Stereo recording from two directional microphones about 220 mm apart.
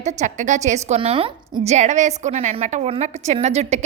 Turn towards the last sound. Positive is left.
turn(degrees=-30)  # may be behind; listen again after turning